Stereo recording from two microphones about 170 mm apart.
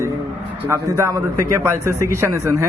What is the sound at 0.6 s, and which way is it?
Speech, 15° right (ahead or behind).